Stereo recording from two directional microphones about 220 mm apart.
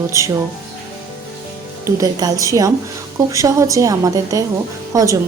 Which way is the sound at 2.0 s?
15° right (ahead or behind).